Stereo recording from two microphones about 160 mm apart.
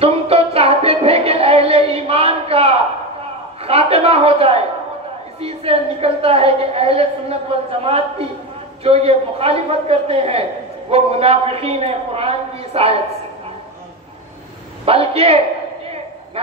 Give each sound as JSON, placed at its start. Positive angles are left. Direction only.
{"t": 0.0, "sound": "a sound", "side_deg": -40}
{"t": 5.4, "sound": "a man's voice", "side_deg": -40}
{"t": 14.9, "sound": "a man's voice", "side_deg": -40}